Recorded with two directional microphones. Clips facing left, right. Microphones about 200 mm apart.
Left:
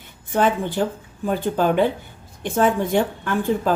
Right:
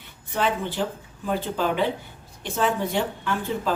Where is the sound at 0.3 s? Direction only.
50° left (ahead or behind).